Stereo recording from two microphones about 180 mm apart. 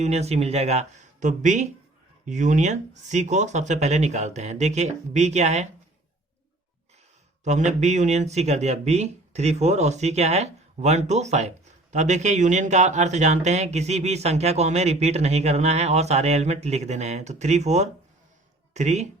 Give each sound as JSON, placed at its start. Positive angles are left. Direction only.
{"t": 0.0, "sound": "speech", "side_deg": -35}
{"t": 7.4, "sound": "speech", "side_deg": -40}